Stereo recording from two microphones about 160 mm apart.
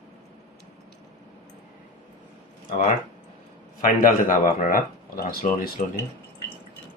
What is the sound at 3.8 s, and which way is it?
Speech, 55° left (ahead or behind).